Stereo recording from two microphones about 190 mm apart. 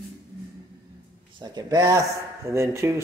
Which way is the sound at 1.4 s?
20° right (ahead or behind).